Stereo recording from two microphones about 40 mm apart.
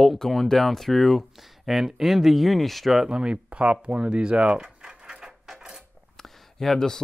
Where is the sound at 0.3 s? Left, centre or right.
Centre.